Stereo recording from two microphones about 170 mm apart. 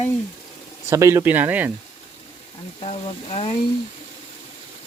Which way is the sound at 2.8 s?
35° left (ahead or behind).